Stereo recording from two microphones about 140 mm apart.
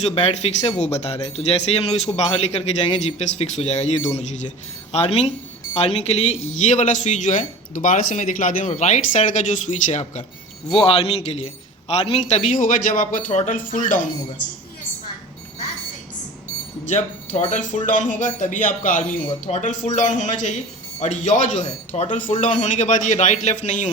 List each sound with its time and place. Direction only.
0.0 s speech: 50° left (ahead or behind)
10.7 s a man's voice: 40° left (ahead or behind); by 14.1 s 70° left (ahead or behind)
16.8 s speech: 55° left (ahead or behind)
22.3 s speech: 65° left (ahead or behind)